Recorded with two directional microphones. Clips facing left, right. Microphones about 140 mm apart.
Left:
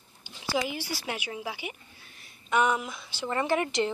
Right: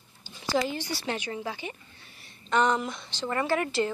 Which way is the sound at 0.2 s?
5° left (ahead or behind).